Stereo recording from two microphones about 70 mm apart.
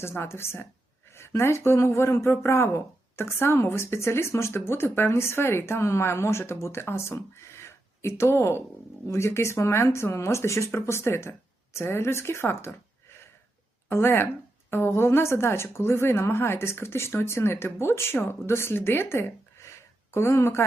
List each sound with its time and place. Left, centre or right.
0.0 s speech: left